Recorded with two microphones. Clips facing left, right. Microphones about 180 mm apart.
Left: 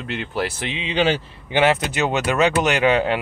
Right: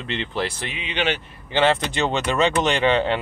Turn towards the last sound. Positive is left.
turn(degrees=5)  # may be behind; listen again after turning